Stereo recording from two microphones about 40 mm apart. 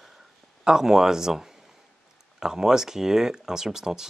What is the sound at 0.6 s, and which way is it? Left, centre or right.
Speech, centre.